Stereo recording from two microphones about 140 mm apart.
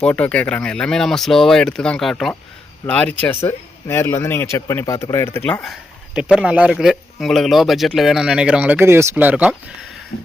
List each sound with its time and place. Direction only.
0.0 s speech: 10° left (ahead or behind)
5.6 s speech: 5° right (ahead or behind)